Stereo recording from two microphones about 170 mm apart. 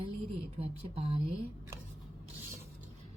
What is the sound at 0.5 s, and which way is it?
Speech, 35° right (ahead or behind).